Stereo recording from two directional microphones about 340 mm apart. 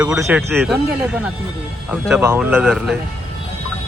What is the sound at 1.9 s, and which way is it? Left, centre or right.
Speech, centre.